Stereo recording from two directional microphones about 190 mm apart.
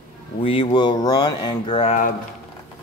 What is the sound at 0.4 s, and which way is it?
Speech, 30° left (ahead or behind).